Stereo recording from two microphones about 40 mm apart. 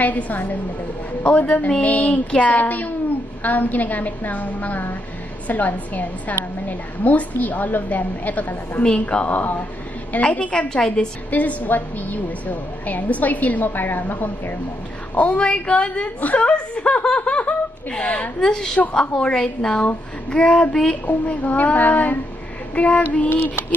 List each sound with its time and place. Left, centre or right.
0.0 s a woman's voice: left
2.6 s a woman's voice: left
8.8 s speech: left
10.7 s a woman's voice: centre
11.2 s a woman's voice: left
15.1 s a woman's voice: left
16.2 s speech: left
16.4 s speech: left
18.4 s a woman's voice: centre
20.7 s a woman's voice: centre
21.4 s a woman's voice: left
23.3 s a sound: left